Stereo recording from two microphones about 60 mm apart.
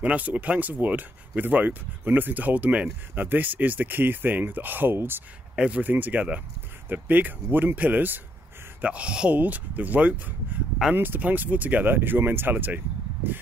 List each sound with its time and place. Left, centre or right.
0.0 s speech: right
5.6 s speech: right
8.8 s speech: centre
9.3 s speech: right